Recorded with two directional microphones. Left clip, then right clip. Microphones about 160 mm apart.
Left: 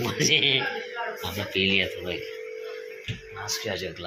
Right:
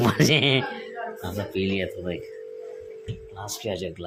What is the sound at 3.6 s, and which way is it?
Speech, 55° right (ahead or behind).